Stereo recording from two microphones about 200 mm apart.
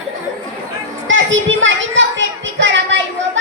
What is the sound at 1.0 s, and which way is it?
Children playing, 70° right (ahead or behind).